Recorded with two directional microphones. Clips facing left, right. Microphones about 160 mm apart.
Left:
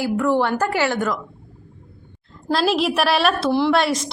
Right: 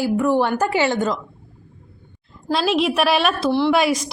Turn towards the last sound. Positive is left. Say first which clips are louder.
# right 1 dB
turn(degrees=-5)  # may be behind; listen again after turning